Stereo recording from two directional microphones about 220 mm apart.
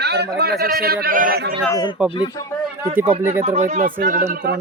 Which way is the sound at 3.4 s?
30° right (ahead or behind).